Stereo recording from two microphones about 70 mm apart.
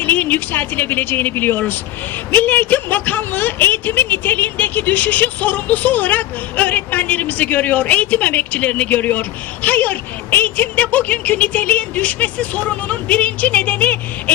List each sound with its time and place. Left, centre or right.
0.0 s a woman's voice: left